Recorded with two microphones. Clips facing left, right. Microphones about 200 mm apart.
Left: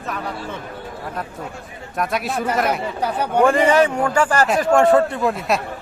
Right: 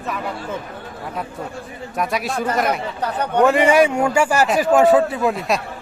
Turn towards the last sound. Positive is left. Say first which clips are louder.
# even
turn(degrees=0)  # may be behind; listen again after turning